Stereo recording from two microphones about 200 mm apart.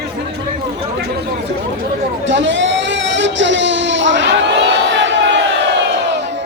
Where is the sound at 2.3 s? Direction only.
65° right (ahead or behind).